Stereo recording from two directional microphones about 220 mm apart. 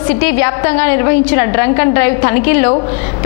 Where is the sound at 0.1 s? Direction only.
10° left (ahead or behind).